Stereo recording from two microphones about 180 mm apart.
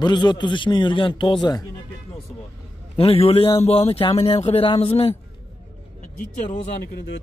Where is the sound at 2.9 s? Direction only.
30° left (ahead or behind).